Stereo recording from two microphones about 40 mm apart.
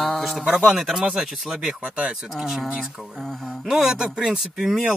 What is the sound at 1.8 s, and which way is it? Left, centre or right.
Speech, right.